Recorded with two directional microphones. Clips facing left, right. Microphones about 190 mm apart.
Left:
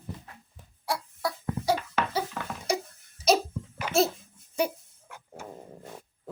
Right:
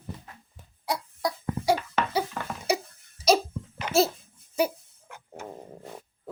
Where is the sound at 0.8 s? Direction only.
20° right (ahead or behind).